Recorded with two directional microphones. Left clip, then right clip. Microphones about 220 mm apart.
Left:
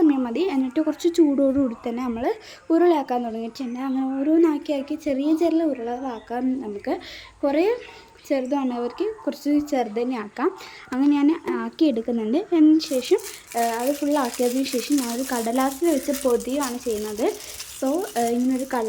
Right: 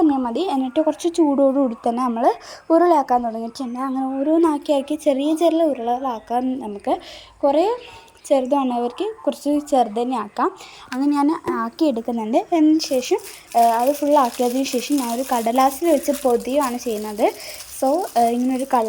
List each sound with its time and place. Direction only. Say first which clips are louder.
0.0 s a woman's voice: right 2 dB; 10° right (ahead or behind)
1.8 s a woman's voice: right 8 dB; 20° right (ahead or behind)
14.9 s speech: right 2 dB; centre (ahead or behind)
15.3 s a woman's voice: right 7 dB; 15° right (ahead or behind)